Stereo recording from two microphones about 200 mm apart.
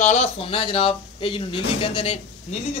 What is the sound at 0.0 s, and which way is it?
Speech, 35° left (ahead or behind).